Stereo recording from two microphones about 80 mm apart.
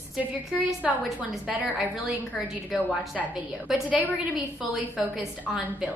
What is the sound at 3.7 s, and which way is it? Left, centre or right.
Speech, centre.